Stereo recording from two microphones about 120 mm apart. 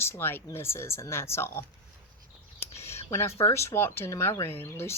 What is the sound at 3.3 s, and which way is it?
Speech, 55° left (ahead or behind).